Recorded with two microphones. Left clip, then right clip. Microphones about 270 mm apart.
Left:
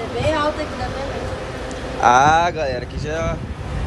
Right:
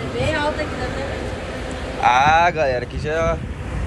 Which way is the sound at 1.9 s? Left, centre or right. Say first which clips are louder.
Left 1 dB; left.